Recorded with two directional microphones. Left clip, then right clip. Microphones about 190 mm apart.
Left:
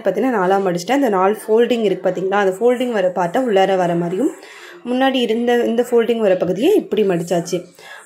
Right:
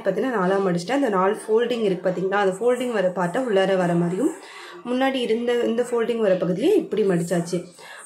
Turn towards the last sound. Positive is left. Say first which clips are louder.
# left 5 dB
turn(degrees=20)  # may be behind; listen again after turning